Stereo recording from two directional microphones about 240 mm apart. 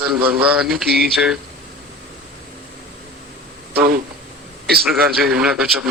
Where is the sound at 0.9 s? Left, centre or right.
Right.